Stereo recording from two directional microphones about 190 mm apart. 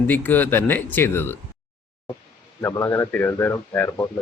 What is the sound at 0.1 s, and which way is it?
A man's voice, 10° left (ahead or behind).